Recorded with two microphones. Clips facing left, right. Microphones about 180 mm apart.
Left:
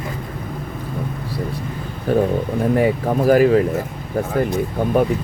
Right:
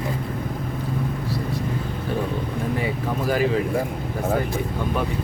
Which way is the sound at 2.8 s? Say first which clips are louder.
Left 8 dB; 50° left (ahead or behind).